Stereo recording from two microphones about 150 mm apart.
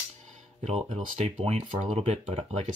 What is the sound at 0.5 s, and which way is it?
Speech, 45° right (ahead or behind).